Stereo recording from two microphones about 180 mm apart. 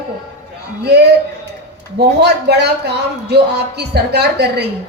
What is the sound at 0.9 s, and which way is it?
Music, 65° right (ahead or behind).